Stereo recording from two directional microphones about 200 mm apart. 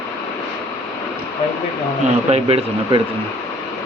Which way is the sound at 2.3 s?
30° right (ahead or behind).